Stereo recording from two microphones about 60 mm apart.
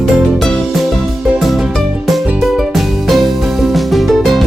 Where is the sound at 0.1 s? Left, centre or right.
Centre.